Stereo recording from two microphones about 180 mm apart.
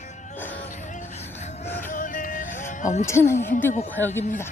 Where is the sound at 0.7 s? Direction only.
40° left (ahead or behind).